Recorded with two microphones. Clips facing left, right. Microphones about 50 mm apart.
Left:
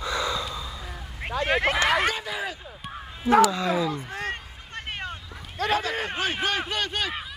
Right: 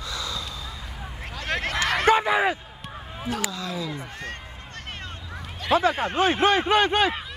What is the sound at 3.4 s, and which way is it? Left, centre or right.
Speech, left.